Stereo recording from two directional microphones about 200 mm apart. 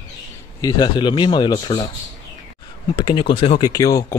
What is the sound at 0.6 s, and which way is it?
Speech, 20° left (ahead or behind).